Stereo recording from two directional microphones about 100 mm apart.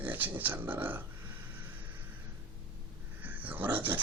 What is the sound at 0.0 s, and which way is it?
Speech, 15° right (ahead or behind).